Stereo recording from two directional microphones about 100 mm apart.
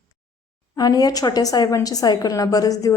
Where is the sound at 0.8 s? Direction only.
40° left (ahead or behind).